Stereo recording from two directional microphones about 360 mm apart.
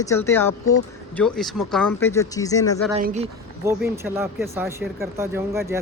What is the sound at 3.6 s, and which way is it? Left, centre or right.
Speech, centre.